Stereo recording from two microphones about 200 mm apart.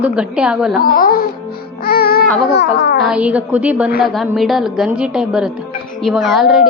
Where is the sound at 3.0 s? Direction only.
5° right (ahead or behind).